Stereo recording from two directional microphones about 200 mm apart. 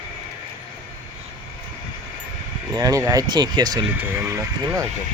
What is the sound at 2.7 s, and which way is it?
Speech, 15° right (ahead or behind).